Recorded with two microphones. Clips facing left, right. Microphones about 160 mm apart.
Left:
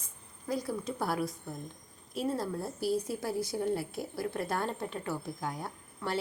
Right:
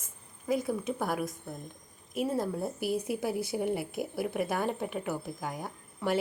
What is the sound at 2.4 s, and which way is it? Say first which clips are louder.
A woman's voice: right 2 dB; 20° right (ahead or behind).